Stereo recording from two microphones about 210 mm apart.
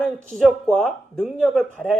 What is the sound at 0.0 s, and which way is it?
Speech, 5° left (ahead or behind).